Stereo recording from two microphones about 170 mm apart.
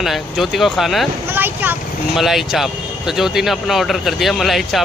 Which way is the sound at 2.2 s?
Centre (ahead or behind).